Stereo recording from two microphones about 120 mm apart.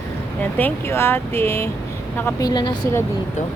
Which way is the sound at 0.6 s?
20° left (ahead or behind).